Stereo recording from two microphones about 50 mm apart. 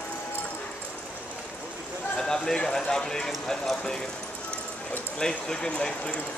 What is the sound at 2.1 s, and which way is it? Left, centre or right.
Speech, centre.